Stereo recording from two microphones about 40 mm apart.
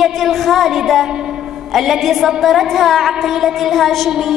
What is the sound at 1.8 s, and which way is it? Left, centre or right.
A woman's voice, centre.